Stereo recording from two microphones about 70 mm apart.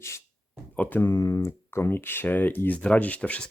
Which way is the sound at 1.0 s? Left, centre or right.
Left.